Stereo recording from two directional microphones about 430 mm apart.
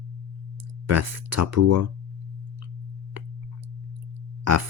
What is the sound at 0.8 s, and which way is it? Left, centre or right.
Speech, right.